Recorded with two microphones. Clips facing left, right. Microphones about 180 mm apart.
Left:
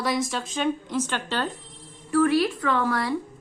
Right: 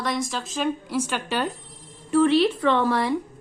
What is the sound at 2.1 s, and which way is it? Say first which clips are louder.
Speech: right 2 dB; 25° right (ahead or behind).